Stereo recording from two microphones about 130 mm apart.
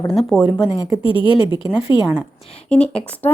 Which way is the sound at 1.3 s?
40° left (ahead or behind).